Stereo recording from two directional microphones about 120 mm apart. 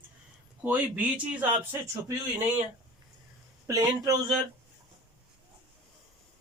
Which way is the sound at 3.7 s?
30° right (ahead or behind).